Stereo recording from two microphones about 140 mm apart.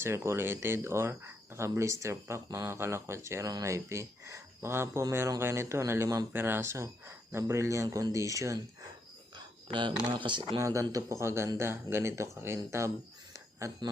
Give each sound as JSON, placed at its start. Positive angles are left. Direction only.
{"t": 0.0, "sound": "speech", "side_deg": -20}
{"t": 9.6, "sound": "speech", "side_deg": -35}
{"t": 10.6, "sound": "speech", "side_deg": -20}
{"t": 13.3, "sound": "a sound", "side_deg": -20}